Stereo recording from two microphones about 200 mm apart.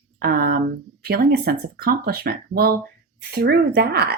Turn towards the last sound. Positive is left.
turn(degrees=-50)  # may be behind; listen again after turning